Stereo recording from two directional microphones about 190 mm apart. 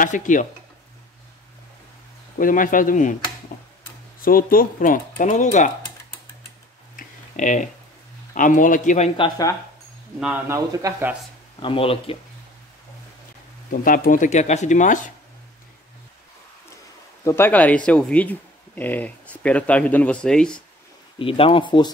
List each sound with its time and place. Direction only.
0.0 s speech: 40° left (ahead or behind)
2.3 s speech: 45° left (ahead or behind)
4.2 s speech: 50° left (ahead or behind)
7.0 s clicking: 40° left (ahead or behind)
8.4 s speech: 45° left (ahead or behind); by 9.5 s 30° left (ahead or behind)
10.2 s speech: 10° right (ahead or behind)
11.6 s speech: 30° left (ahead or behind)
13.7 s speech: 45° left (ahead or behind)
17.2 s speech: 15° left (ahead or behind)
21.2 s speech: 30° left (ahead or behind)